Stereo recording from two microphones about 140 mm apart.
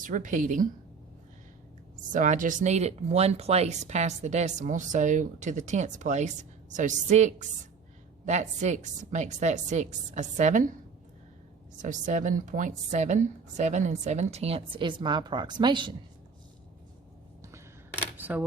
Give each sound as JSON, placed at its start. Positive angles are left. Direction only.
{"t": 0.0, "sound": "speech", "side_deg": -70}
{"t": 2.0, "sound": "speech", "side_deg": -65}
{"t": 11.8, "sound": "speech", "side_deg": -65}
{"t": 18.2, "sound": "a sound", "side_deg": -15}